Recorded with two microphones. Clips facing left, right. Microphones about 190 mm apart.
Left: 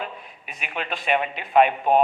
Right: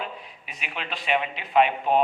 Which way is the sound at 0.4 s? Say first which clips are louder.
Left 4 dB; 50° left (ahead or behind).